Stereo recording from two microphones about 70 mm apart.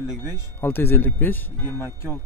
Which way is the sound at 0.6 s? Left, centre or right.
Left.